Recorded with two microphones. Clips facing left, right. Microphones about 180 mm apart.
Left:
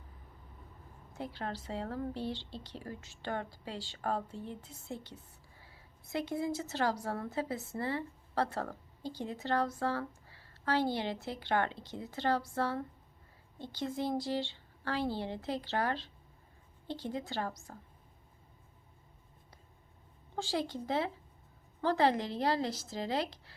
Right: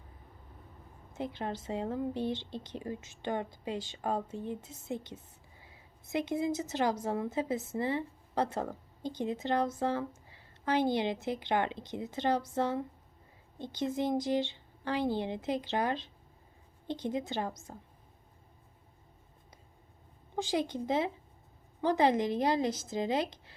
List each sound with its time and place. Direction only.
1.1 s a woman's voice: 20° right (ahead or behind)
20.3 s a woman's voice: 15° right (ahead or behind)